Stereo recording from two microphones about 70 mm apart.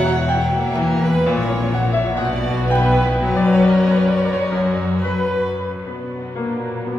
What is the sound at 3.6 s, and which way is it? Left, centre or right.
Music, centre.